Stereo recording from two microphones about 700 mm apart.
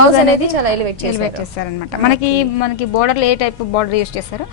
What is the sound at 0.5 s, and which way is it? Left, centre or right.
Speech, right.